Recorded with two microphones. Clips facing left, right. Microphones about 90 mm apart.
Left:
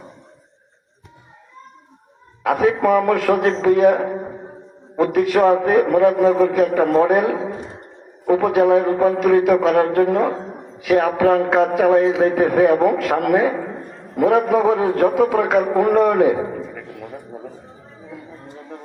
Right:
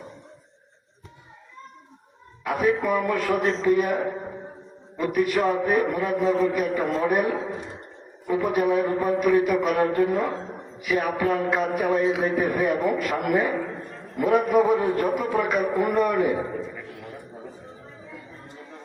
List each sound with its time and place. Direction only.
2.4 s a man's voice: 90° left